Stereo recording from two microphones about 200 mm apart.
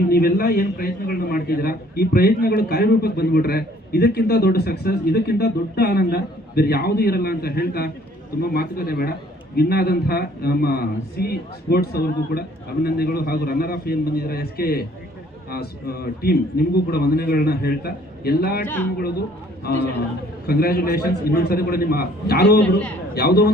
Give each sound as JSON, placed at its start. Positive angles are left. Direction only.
{"t": 0.1, "sound": "a man's voice", "side_deg": 50}
{"t": 18.6, "sound": "speech", "side_deg": 10}
{"t": 20.5, "sound": "a man's voice", "side_deg": 50}